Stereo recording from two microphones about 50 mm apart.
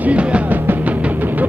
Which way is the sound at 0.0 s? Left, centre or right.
Right.